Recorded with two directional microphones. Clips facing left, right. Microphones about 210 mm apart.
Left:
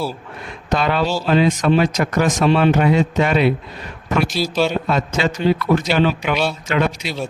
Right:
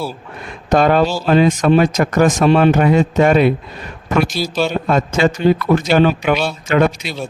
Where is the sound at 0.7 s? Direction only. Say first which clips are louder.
Right 6 dB; 45° right (ahead or behind).